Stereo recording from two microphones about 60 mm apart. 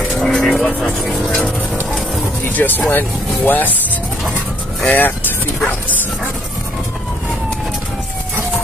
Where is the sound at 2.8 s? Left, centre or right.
Left.